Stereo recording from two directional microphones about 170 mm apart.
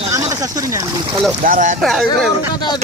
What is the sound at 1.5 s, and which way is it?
Speech, 50° right (ahead or behind).